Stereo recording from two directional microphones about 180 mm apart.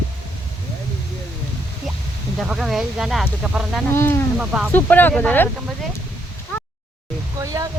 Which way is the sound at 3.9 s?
15° left (ahead or behind).